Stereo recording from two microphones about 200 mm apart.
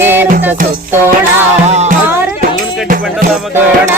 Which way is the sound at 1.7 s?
35° right (ahead or behind).